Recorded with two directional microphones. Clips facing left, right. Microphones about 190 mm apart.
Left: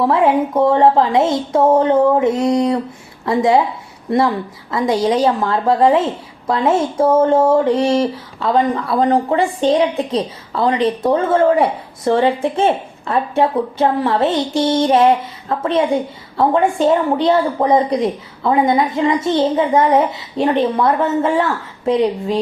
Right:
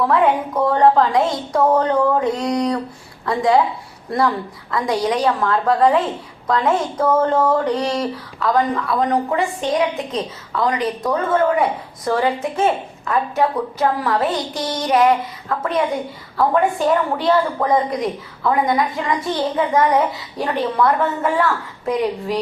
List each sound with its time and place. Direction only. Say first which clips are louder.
0.0 s a woman's voice: left 3 dB; 25° left (ahead or behind)